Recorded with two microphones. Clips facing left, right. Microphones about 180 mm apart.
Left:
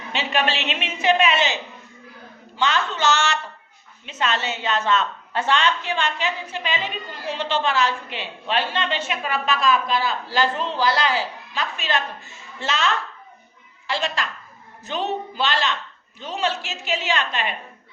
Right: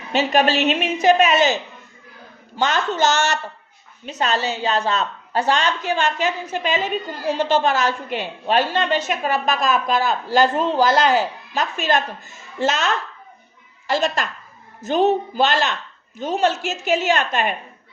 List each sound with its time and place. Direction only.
0.1 s a woman's voice: 40° right (ahead or behind)
2.6 s a woman's voice: 45° right (ahead or behind)